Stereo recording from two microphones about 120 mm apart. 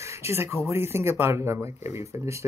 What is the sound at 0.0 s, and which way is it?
Speech, 25° right (ahead or behind).